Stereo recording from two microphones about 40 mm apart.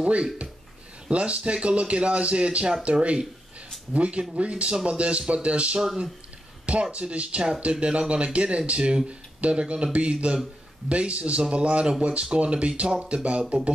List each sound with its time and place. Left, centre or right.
0.0 s speech: right
5.8 s speech: centre
6.6 s speech: right